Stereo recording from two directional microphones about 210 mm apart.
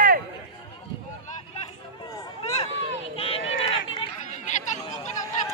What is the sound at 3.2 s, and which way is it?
Chatter, 25° left (ahead or behind).